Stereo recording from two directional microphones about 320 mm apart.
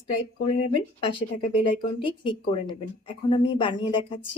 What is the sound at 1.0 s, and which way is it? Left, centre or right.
Speech, centre.